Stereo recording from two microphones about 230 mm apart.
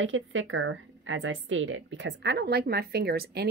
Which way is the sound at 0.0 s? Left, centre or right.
Right.